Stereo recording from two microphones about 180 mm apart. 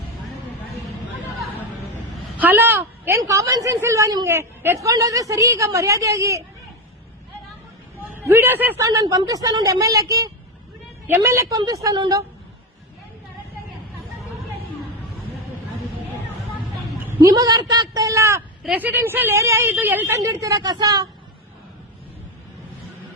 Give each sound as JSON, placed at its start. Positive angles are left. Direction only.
{"t": 2.4, "sound": "a woman's voice", "side_deg": -10}
{"t": 8.1, "sound": "speech", "side_deg": -15}
{"t": 17.2, "sound": "a woman's voice", "side_deg": -20}